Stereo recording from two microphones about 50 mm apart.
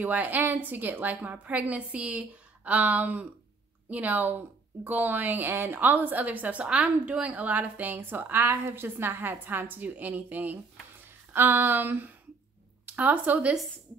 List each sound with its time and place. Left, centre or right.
0.0 s speech: right